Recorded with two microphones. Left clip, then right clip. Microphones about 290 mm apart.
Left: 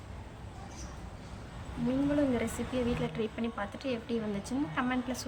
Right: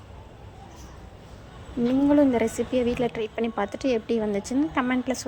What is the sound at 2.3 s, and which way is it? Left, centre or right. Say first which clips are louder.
A woman's voice: right 9 dB; centre.